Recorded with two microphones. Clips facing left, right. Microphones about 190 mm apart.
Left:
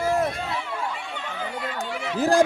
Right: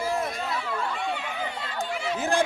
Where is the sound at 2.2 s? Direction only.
35° left (ahead or behind).